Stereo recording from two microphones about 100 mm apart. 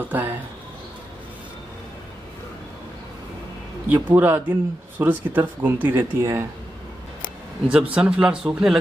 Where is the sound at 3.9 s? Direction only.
20° right (ahead or behind).